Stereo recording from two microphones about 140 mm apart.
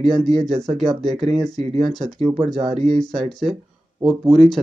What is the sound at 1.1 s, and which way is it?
Speech, 45° right (ahead or behind).